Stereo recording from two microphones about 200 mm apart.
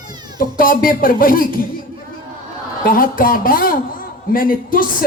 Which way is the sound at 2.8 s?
45° left (ahead or behind).